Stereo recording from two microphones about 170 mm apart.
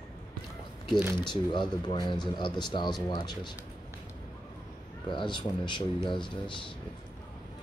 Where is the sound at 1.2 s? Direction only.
25° left (ahead or behind).